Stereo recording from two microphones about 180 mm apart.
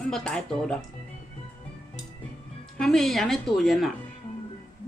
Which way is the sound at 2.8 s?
Centre (ahead or behind).